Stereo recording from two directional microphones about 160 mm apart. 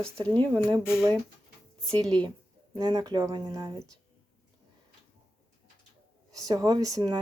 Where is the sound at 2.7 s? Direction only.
25° right (ahead or behind).